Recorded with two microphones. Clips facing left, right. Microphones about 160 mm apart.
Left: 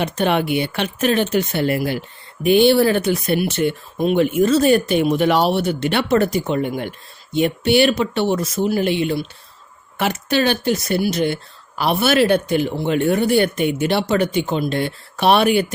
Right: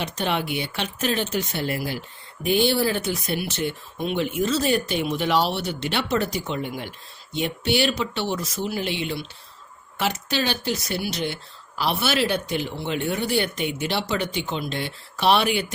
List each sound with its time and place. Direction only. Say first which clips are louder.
0.0 s speech: left 7 dB; 55° left (ahead or behind)